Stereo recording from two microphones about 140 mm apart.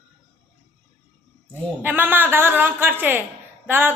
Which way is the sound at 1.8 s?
15° right (ahead or behind).